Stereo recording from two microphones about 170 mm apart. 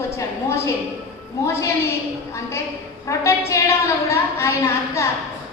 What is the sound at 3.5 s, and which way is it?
A woman's voice, 15° left (ahead or behind).